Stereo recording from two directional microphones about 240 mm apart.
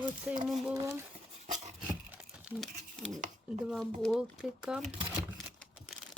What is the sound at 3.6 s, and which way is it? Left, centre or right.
Speech, centre.